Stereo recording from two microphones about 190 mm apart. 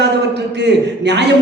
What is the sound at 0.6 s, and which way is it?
Speech, 65° right (ahead or behind).